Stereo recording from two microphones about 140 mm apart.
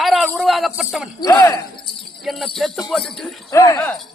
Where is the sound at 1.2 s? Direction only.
25° left (ahead or behind).